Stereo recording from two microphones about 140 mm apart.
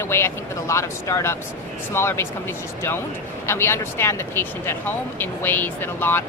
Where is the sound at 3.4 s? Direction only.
20° left (ahead or behind).